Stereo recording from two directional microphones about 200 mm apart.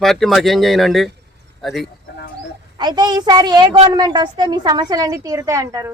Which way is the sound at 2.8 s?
20° right (ahead or behind).